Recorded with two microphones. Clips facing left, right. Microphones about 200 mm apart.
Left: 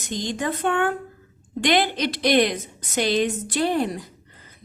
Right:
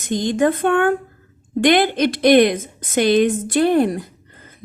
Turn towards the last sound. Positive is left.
turn(degrees=-55)  # may be behind; listen again after turning